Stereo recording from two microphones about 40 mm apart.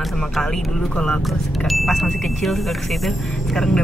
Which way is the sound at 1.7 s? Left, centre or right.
Centre.